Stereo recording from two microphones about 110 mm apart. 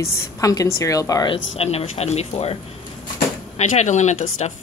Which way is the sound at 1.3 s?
65° left (ahead or behind).